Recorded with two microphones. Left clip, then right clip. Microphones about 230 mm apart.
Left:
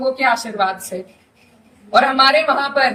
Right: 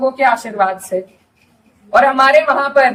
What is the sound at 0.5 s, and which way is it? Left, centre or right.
Speech, centre.